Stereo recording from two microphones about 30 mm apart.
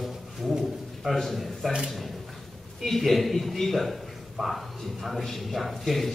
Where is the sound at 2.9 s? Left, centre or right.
Centre.